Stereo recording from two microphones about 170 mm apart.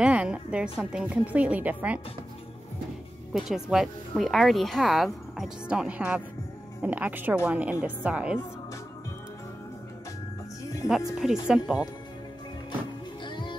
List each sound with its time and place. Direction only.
0.0 s speech: 5° right (ahead or behind)
3.3 s speech: centre (ahead or behind)
11.1 s speech: 5° right (ahead or behind)
13.2 s music: 25° left (ahead or behind)